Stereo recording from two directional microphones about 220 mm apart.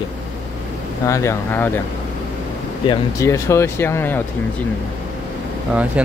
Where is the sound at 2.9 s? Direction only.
15° left (ahead or behind).